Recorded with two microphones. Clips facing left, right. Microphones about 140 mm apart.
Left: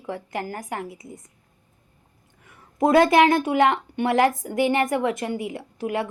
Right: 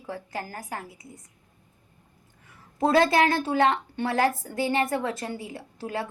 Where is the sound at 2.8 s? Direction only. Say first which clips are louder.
Left 4 dB; 20° left (ahead or behind).